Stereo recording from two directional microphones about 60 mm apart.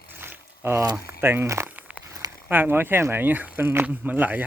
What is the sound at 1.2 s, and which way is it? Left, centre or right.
Speech, right.